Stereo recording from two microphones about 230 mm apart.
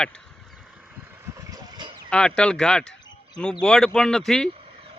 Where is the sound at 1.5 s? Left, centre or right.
Centre.